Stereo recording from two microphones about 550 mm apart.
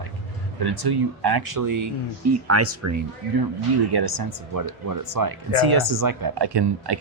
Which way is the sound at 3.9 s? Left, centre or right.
Right.